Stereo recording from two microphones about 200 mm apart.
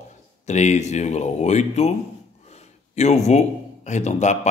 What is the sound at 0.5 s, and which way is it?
A man's voice, 35° left (ahead or behind).